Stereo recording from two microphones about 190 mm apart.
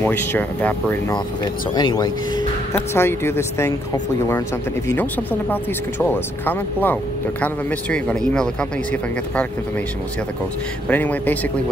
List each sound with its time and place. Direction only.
0.0 s speech: 10° left (ahead or behind)
1.1 s speech: 20° left (ahead or behind)
2.7 s speech: 10° left (ahead or behind)
5.5 s speech: 10° left (ahead or behind)
10.9 s speech: 10° left (ahead or behind)